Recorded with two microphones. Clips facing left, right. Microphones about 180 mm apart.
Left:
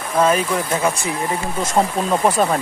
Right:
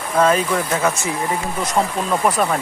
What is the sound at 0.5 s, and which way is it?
Speech, 10° left (ahead or behind).